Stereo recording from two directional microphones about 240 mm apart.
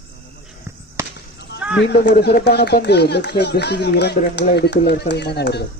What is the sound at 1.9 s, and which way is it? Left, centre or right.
Speech, left.